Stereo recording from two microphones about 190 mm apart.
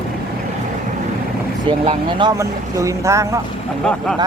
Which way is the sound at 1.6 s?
25° right (ahead or behind).